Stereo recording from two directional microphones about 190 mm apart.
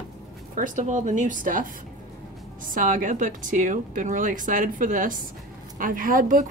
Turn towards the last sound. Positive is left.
turn(degrees=-45)  # may be behind; listen again after turning